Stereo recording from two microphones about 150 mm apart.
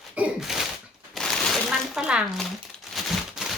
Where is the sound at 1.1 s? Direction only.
Centre (ahead or behind).